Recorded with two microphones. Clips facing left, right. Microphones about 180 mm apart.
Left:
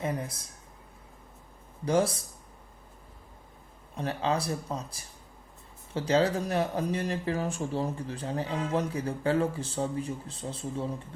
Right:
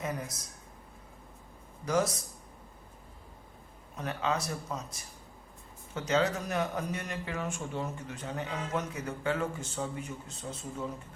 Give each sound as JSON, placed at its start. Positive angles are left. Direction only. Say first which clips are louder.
{"t": 0.0, "sound": "a man's voice", "louder": "left 4 dB", "side_deg": 30}
{"t": 1.8, "sound": "a man's voice", "louder": "left 3 dB", "side_deg": 30}
{"t": 3.9, "sound": "a man's voice", "louder": "left 3 dB", "side_deg": 30}